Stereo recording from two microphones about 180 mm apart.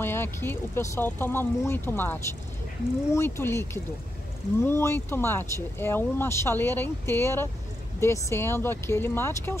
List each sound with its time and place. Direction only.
0.0 s speech: 15° left (ahead or behind)